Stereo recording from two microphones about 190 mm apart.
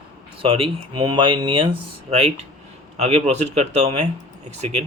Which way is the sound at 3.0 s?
30° right (ahead or behind).